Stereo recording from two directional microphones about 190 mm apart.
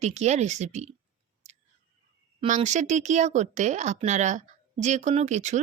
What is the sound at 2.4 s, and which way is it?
Speech, 40° right (ahead or behind).